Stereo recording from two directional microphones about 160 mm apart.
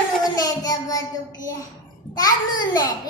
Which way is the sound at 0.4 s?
25° left (ahead or behind).